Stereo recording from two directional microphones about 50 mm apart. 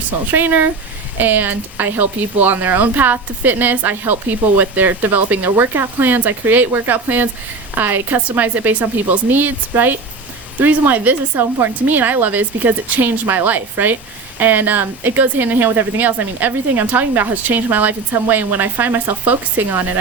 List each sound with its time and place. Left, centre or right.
0.3 s speech: right